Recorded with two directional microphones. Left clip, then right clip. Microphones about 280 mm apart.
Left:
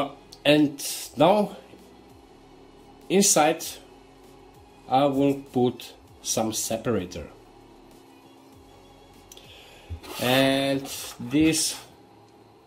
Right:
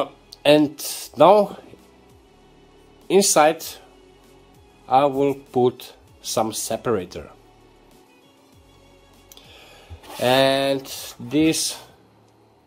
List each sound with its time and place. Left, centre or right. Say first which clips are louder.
0.0 s speech: right 4 dB; right
3.1 s speech: right 5 dB; right
4.8 s speech: right 4 dB; centre
9.3 s music: right 2 dB; right
10.2 s speech: right 5 dB; right